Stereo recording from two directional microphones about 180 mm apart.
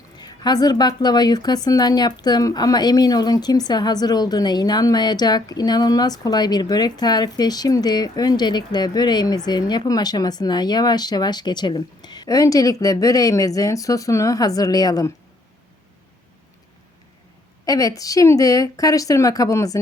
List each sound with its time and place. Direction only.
0.2 s a woman's voice: 20° left (ahead or behind)
17.7 s a woman's voice: 20° left (ahead or behind)